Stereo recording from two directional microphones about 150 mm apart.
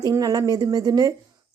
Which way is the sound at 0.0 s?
25° right (ahead or behind).